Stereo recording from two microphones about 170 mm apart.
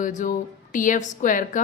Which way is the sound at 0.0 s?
50° left (ahead or behind).